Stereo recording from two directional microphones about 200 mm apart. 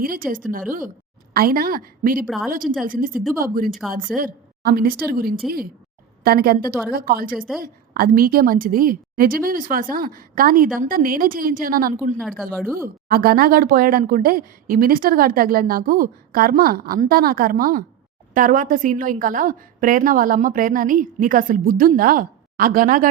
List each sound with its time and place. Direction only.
0.0 s speech: 45° right (ahead or behind)
2.2 s speech: centre (ahead or behind)
2.8 s speech: 45° right (ahead or behind)
3.7 s speech: centre (ahead or behind)
4.2 s speech: 45° right (ahead or behind)
7.3 s speech: centre (ahead or behind)
7.6 s speech: 45° right (ahead or behind)
12.4 s speech: centre (ahead or behind)
13.1 s speech: 50° right (ahead or behind)